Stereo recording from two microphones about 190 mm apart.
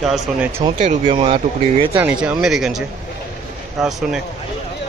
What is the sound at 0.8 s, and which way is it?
Speech, 35° right (ahead or behind).